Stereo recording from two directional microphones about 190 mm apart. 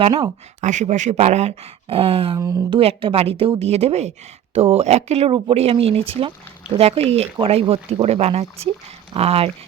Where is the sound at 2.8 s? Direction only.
30° right (ahead or behind).